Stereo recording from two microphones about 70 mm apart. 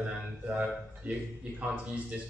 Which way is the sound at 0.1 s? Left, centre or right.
Centre.